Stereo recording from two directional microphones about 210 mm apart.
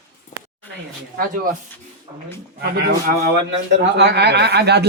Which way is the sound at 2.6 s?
50° right (ahead or behind).